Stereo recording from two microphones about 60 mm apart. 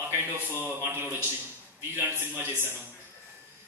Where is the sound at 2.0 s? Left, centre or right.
Right.